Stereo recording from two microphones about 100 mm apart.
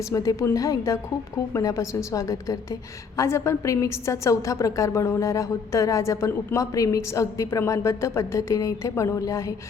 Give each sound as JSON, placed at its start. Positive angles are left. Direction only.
{"t": 0.1, "sound": "a woman's voice", "side_deg": 35}